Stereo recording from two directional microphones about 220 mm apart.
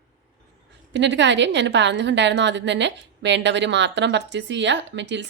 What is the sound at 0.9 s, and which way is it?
A woman's voice, 55° right (ahead or behind).